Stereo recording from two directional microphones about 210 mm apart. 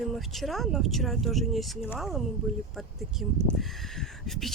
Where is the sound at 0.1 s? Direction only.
Centre (ahead or behind).